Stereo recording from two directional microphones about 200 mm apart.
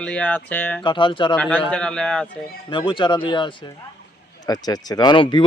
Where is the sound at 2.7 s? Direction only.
25° left (ahead or behind).